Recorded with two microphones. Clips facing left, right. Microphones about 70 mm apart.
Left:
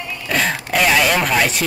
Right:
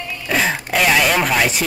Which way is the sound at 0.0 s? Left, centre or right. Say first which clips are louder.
Right 1 dB; centre.